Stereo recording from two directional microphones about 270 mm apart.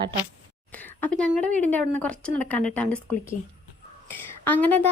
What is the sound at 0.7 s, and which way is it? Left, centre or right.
Speech, centre.